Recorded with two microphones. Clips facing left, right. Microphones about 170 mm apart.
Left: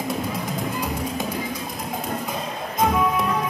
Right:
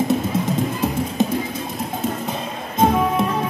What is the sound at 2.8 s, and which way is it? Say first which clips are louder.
Music: right 4 dB; 25° right (ahead or behind).